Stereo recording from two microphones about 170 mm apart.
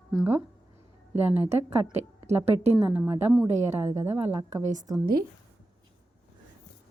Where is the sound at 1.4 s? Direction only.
40° right (ahead or behind).